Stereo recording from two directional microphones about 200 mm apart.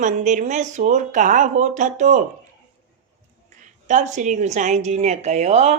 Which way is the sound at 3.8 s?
35° right (ahead or behind).